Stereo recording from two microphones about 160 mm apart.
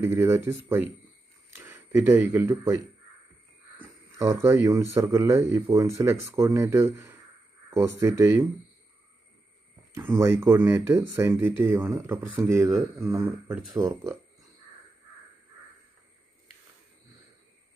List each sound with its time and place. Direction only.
0.0 s speech: 15° right (ahead or behind)
4.4 s speech: 15° right (ahead or behind)
9.9 s speech: 15° right (ahead or behind)